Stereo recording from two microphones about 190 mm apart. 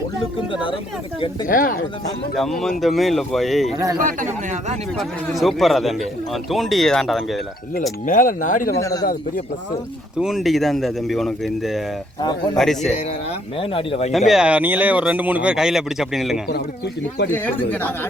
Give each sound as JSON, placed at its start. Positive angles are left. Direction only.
{"t": 1.5, "sound": "speech", "side_deg": 45}
{"t": 2.3, "sound": "a man's voice", "side_deg": 0}
{"t": 4.9, "sound": "a man's voice", "side_deg": 0}
{"t": 8.0, "sound": "speech", "side_deg": 45}
{"t": 8.8, "sound": "a man's voice", "side_deg": 20}
{"t": 10.2, "sound": "a man's voice", "side_deg": 0}
{"t": 12.2, "sound": "a man's voice", "side_deg": 20}
{"t": 12.5, "sound": "a man's voice", "side_deg": 0}
{"t": 13.6, "sound": "speech", "side_deg": 30}
{"t": 14.3, "sound": "a man's voice", "side_deg": -5}
{"t": 16.5, "sound": "speech", "side_deg": 60}
{"t": 17.3, "sound": "speech", "side_deg": 10}